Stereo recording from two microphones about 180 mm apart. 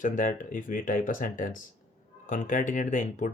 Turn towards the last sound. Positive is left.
turn(degrees=45)  # may be behind; listen again after turning